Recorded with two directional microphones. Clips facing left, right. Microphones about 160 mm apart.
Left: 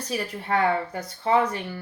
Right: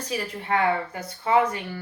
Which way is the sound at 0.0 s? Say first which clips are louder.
Even; 35° left (ahead or behind).